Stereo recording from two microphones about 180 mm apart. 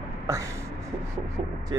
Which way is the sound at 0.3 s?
15° right (ahead or behind).